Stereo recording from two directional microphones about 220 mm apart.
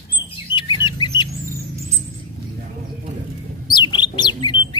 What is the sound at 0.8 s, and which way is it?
Bird, 20° left (ahead or behind).